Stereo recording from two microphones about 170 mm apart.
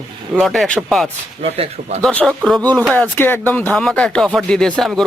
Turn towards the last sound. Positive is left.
turn(degrees=0)  # may be behind; listen again after turning